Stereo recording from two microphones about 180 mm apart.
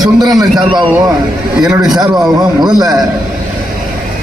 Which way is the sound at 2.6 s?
20° right (ahead or behind).